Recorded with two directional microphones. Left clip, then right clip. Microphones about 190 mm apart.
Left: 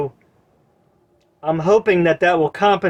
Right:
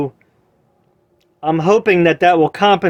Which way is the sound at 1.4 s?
50° right (ahead or behind).